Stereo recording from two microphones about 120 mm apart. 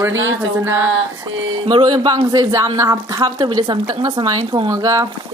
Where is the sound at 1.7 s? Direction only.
40° right (ahead or behind).